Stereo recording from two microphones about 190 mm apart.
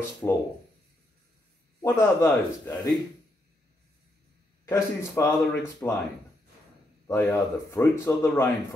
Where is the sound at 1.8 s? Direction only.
15° left (ahead or behind).